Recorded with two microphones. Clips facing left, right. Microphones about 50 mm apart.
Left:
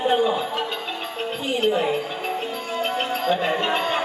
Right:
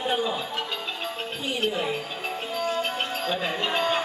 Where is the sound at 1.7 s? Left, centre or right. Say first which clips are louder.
Left 6 dB; centre.